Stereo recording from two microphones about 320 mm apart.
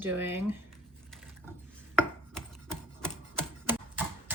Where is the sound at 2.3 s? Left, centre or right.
Centre.